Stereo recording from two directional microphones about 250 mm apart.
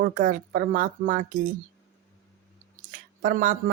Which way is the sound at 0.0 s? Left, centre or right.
Right.